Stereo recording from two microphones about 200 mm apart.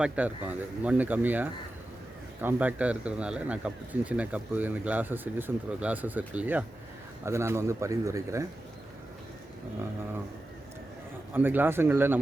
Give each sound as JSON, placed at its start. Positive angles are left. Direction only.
{"t": 0.0, "sound": "speech", "side_deg": -5}
{"t": 11.3, "sound": "speech", "side_deg": -10}